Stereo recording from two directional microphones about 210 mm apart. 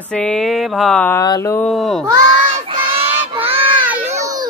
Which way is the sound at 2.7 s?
25° right (ahead or behind).